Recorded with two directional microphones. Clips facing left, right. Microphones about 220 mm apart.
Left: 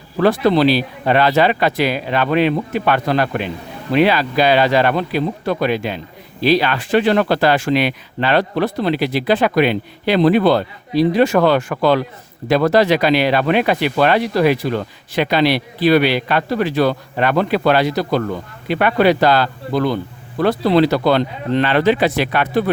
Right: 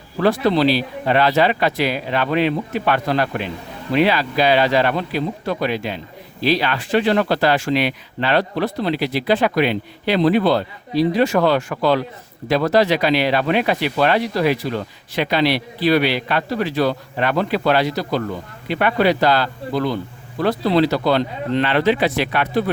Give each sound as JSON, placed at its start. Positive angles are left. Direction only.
{"t": 0.2, "sound": "speech", "side_deg": 55}